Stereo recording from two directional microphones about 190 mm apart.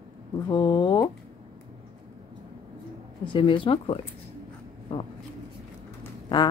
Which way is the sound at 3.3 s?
25° left (ahead or behind).